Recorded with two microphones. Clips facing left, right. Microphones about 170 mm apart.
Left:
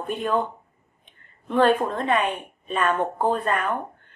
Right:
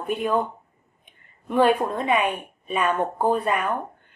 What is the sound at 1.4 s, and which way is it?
A woman's voice, 10° right (ahead or behind).